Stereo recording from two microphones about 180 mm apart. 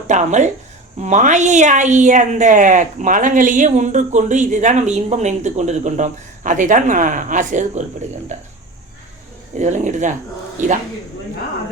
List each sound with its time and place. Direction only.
0.1 s speech: 40° right (ahead or behind)
9.6 s speech: 40° right (ahead or behind)